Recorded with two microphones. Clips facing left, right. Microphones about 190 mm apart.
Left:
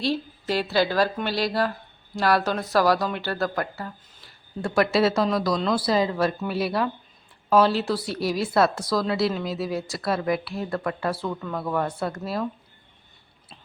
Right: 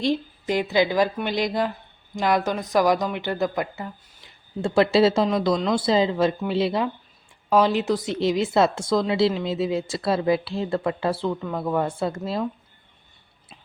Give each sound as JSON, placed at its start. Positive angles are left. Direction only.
{"t": 0.0, "sound": "speech", "side_deg": -15}
{"t": 4.6, "sound": "a woman's voice", "side_deg": -25}